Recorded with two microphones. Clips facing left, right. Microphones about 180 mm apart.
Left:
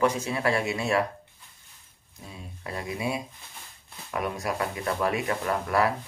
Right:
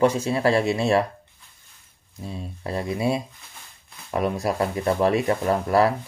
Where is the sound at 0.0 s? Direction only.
30° right (ahead or behind).